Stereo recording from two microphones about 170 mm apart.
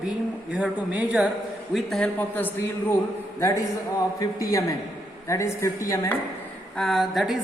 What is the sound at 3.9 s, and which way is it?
A man's voice, 20° left (ahead or behind).